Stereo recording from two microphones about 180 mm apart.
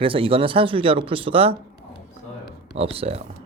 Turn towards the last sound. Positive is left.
turn(degrees=-35)  # may be behind; listen again after turning